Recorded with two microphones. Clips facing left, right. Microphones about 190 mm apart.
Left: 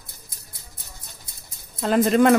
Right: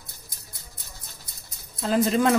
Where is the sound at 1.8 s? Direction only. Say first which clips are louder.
Left 4 dB; 60° left (ahead or behind).